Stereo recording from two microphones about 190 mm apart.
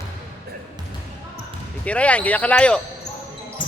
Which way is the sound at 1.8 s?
5° left (ahead or behind).